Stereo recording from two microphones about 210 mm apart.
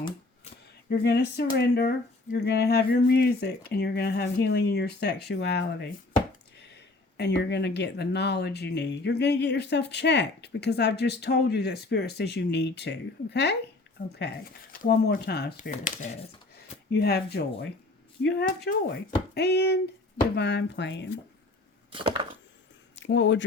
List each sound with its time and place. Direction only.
0.9 s speech: 50° left (ahead or behind)
7.2 s speech: 55° left (ahead or behind); by 16.1 s 40° left (ahead or behind)
16.9 s speech: 50° left (ahead or behind)
21.9 s a sound: 25° right (ahead or behind)
23.0 s speech: 60° left (ahead or behind)